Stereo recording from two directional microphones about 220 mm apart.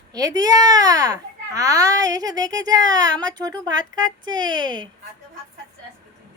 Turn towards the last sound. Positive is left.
turn(degrees=-20)  # may be behind; listen again after turning